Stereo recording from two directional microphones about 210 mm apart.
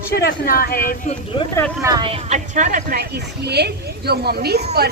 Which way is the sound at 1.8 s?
20° right (ahead or behind).